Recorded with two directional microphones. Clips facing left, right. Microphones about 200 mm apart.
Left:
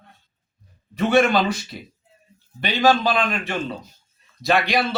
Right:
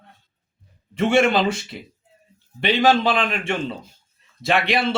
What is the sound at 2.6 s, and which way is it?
Speech, 25° right (ahead or behind).